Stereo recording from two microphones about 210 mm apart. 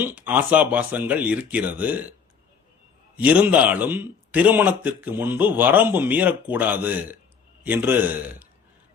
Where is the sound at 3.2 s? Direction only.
5° right (ahead or behind).